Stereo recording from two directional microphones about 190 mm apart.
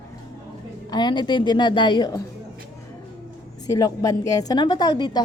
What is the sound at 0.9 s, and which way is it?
A woman's voice, 25° left (ahead or behind).